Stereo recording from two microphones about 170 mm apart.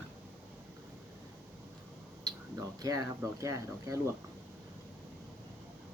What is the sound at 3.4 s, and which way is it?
Speech, 20° right (ahead or behind).